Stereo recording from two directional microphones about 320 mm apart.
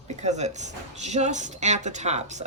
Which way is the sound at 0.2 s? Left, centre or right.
Right.